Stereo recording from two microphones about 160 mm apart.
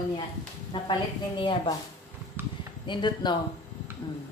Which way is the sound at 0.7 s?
30° left (ahead or behind).